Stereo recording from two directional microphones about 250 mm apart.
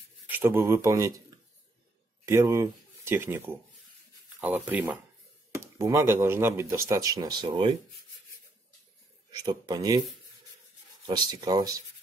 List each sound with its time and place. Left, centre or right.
0.3 s speech: centre
2.2 s speech: centre
9.4 s speech: centre
11.1 s speech: centre